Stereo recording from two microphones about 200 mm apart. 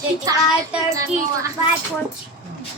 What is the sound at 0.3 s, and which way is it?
Speech, 15° right (ahead or behind).